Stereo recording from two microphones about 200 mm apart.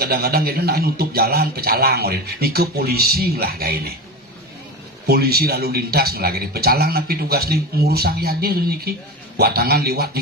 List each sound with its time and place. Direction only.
0.0 s a man's voice: 50° right (ahead or behind)
5.0 s a man's voice: 50° right (ahead or behind)